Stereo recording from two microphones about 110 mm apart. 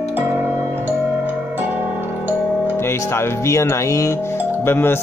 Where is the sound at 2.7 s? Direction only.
25° left (ahead or behind).